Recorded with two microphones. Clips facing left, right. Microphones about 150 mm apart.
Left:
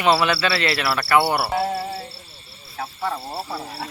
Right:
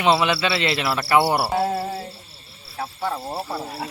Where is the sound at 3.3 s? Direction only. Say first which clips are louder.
Right 2 dB; 20° right (ahead or behind).